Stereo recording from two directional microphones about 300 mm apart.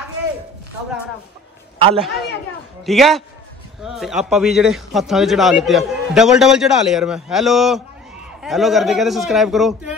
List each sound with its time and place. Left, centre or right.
1.8 s a man's voice: centre
2.8 s a man's voice: centre